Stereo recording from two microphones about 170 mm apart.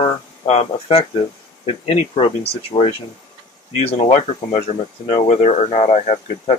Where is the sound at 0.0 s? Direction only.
35° left (ahead or behind).